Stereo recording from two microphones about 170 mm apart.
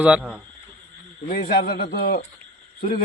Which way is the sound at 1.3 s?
60° left (ahead or behind).